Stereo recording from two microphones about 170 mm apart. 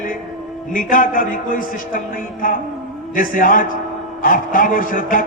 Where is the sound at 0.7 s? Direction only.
55° left (ahead or behind).